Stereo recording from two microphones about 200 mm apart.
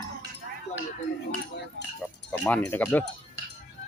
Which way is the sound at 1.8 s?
60° right (ahead or behind).